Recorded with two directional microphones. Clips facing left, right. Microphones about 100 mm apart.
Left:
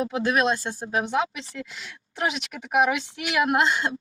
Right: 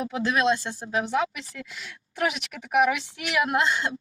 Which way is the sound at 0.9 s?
20° left (ahead or behind).